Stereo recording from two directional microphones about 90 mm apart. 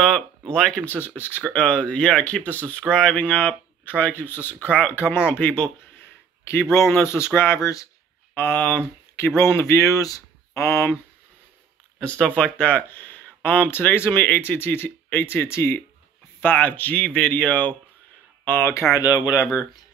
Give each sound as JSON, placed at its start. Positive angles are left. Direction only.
{"t": 0.5, "sound": "speech", "side_deg": 10}
{"t": 1.4, "sound": "speech", "side_deg": 10}
{"t": 6.7, "sound": "speech", "side_deg": 30}
{"t": 8.4, "sound": "speech", "side_deg": 20}
{"t": 12.0, "sound": "speech", "side_deg": 10}
{"t": 18.9, "sound": "speech", "side_deg": 45}